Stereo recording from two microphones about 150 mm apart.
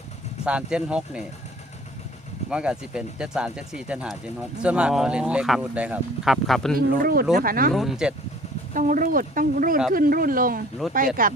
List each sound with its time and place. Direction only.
0.4 s speech: 5° right (ahead or behind)
2.5 s speech: 5° right (ahead or behind)
6.7 s speech: 80° right
7.7 s speech: centre (ahead or behind)
8.7 s speech: 60° right (ahead or behind)